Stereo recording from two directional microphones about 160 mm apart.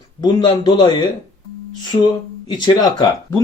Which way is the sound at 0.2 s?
25° left (ahead or behind).